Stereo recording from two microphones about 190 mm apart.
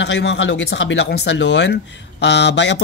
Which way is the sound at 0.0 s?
70° left (ahead or behind).